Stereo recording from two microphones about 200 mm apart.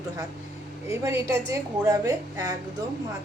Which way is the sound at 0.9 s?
15° right (ahead or behind).